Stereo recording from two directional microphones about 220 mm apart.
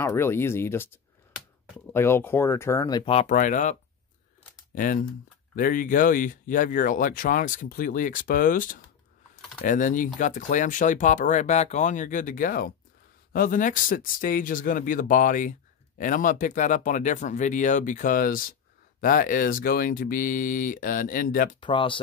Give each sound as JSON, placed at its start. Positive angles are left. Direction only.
{"t": 0.0, "sound": "speech", "side_deg": 10}
{"t": 1.9, "sound": "speech", "side_deg": 10}
{"t": 4.7, "sound": "speech", "side_deg": 40}
{"t": 21.5, "sound": "speech", "side_deg": 20}